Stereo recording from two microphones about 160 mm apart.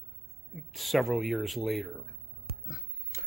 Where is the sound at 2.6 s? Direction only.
20° left (ahead or behind).